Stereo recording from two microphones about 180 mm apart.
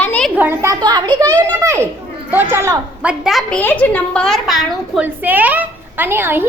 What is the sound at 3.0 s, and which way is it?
A woman's voice, 5° right (ahead or behind).